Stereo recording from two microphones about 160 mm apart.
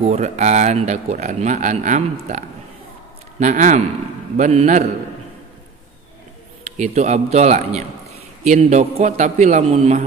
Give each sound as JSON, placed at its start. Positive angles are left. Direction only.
{"t": 0.0, "sound": "speech", "side_deg": -45}
{"t": 6.8, "sound": "speech", "side_deg": -50}